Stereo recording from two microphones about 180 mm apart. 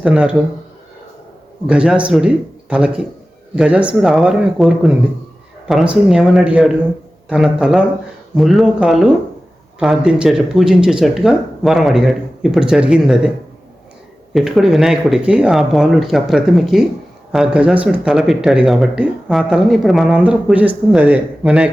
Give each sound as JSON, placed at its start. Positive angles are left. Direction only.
{"t": 0.0, "sound": "speech", "side_deg": -5}
{"t": 1.6, "sound": "speech", "side_deg": -5}
{"t": 14.3, "sound": "speech", "side_deg": 0}